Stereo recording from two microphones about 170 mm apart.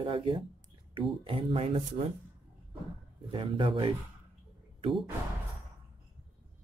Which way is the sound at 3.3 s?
30° right (ahead or behind).